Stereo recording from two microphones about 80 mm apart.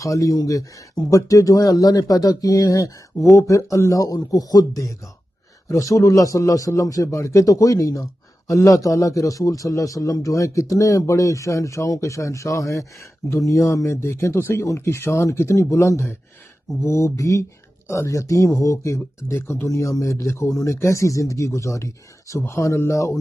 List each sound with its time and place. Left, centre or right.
0.0 s a man's voice: left